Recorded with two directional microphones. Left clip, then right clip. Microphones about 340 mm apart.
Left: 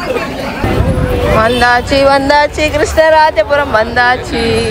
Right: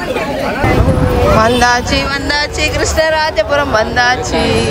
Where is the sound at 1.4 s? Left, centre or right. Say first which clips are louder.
Left 1 dB; centre.